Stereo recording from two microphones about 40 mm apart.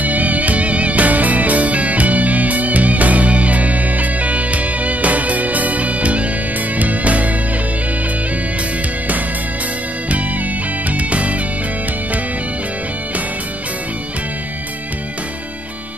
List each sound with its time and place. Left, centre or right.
0.0 s music: right
10.9 s music: right